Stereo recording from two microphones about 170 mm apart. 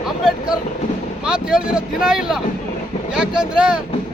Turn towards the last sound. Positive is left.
turn(degrees=-5)  # may be behind; listen again after turning